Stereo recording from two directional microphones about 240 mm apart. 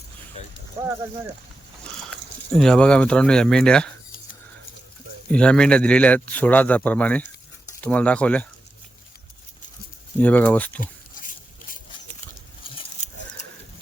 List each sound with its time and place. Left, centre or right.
2.6 s a man's voice: centre
5.3 s a man's voice: centre
10.2 s speech: centre
10.8 s a sound: left